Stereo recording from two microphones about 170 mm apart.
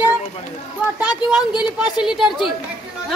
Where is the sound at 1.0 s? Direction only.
5° right (ahead or behind).